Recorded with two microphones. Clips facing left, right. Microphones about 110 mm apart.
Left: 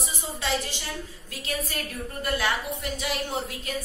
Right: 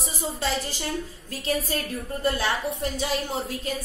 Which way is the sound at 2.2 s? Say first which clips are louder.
Right 2 dB; 30° right (ahead or behind).